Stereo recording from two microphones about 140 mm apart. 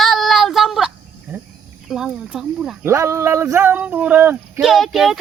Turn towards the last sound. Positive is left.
turn(degrees=0)  # may be behind; listen again after turning